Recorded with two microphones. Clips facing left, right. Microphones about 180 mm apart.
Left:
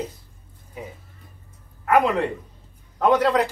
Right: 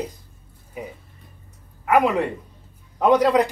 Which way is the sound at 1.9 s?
10° right (ahead or behind).